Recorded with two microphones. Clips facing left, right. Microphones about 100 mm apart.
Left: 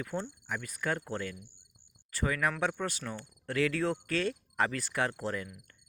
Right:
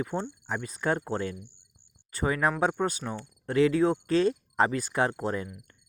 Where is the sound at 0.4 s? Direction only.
25° right (ahead or behind).